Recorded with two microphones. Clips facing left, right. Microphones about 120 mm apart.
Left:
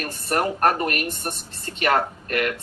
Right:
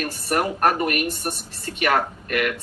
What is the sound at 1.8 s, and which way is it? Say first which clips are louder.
Speech: even; 30° left (ahead or behind).